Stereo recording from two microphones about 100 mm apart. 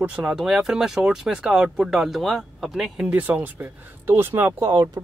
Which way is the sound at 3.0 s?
15° right (ahead or behind).